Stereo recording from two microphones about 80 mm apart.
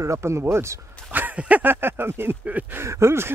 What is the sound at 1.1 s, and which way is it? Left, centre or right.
Speech, right.